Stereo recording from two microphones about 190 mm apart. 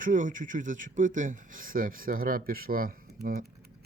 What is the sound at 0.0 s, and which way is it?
Speech, 45° right (ahead or behind).